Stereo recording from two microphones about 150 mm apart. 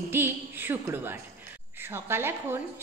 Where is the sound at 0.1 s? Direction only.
15° right (ahead or behind).